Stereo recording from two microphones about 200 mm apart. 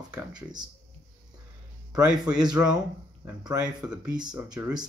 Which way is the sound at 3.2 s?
15° right (ahead or behind).